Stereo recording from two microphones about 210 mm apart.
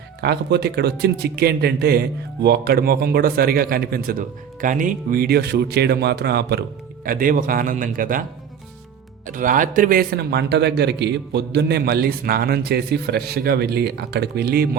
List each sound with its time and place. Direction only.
0.2 s a man's voice: 50° right (ahead or behind)
9.2 s a man's voice: 40° right (ahead or behind)